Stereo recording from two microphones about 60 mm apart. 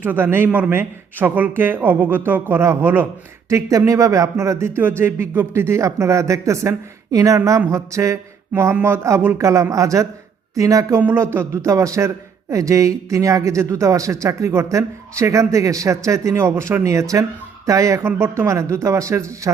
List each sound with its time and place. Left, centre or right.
0.0 s speech: right
3.5 s speech: right
4.8 s speech: right
5.5 s speech: right
9.4 s speech: right
11.2 s speech: right
11.5 s speech: right
18.0 s speech: right